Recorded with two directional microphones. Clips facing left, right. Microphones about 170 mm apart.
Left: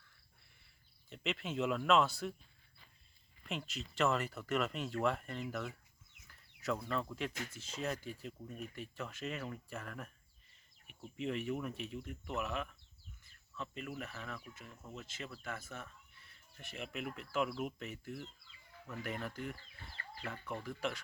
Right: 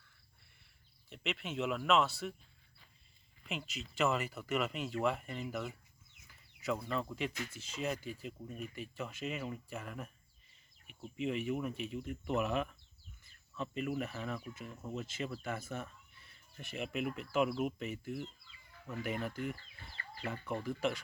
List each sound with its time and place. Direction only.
1.1 s speech: centre (ahead or behind)
3.4 s speech: centre (ahead or behind)
11.2 s speech: 5° right (ahead or behind)